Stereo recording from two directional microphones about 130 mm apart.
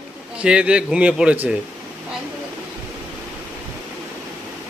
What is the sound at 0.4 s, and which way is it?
Speech, 10° right (ahead or behind).